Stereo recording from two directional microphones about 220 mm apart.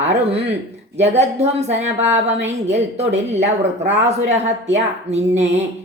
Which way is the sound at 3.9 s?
30° right (ahead or behind).